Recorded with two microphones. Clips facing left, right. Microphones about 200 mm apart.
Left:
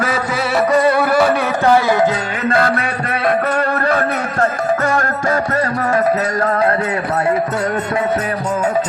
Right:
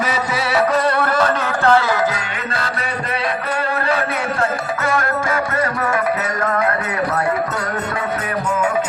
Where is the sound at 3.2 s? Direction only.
50° left (ahead or behind); by 6.7 s 35° left (ahead or behind).